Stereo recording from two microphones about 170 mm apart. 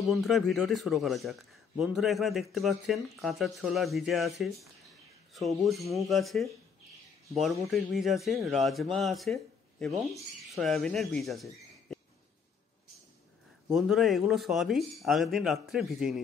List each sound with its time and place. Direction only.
0.0 s a man's voice: centre (ahead or behind)
11.9 s a sound: centre (ahead or behind)
13.7 s a man's voice: centre (ahead or behind)